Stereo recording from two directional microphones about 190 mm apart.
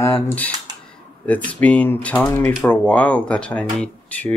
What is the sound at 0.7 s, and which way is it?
Camera, 20° right (ahead or behind).